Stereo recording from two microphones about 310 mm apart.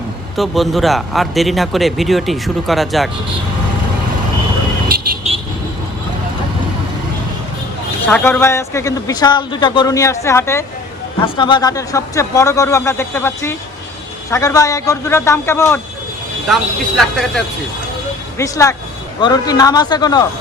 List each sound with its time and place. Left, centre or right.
0.3 s speech: centre
4.9 s vehicle: right
8.0 s speech: centre
17.0 s speech: centre